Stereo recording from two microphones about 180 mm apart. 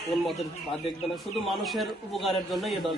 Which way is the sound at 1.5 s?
Centre (ahead or behind).